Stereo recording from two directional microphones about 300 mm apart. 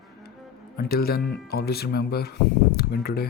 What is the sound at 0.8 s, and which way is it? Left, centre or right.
Speech, left.